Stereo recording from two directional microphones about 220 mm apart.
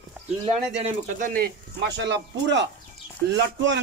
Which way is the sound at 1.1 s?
40° right (ahead or behind).